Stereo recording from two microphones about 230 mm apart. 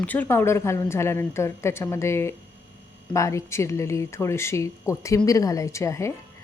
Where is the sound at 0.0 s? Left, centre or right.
Centre.